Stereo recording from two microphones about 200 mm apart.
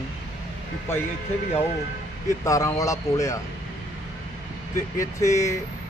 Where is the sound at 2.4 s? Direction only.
15° left (ahead or behind).